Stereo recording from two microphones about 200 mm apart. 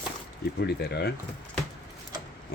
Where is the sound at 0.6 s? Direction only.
55° left (ahead or behind).